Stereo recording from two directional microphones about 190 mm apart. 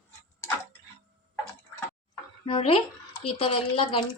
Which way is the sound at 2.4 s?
30° left (ahead or behind).